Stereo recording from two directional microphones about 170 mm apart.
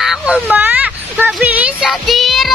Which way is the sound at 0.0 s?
10° right (ahead or behind).